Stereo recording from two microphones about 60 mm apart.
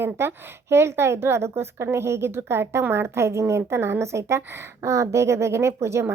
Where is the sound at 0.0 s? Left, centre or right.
Right.